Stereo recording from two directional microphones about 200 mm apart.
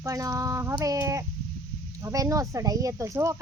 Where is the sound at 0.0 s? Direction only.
15° right (ahead or behind).